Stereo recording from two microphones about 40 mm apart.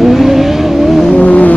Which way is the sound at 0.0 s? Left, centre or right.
Centre.